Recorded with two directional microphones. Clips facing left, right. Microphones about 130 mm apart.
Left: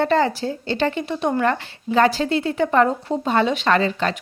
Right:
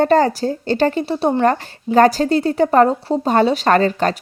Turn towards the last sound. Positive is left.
turn(degrees=-45)  # may be behind; listen again after turning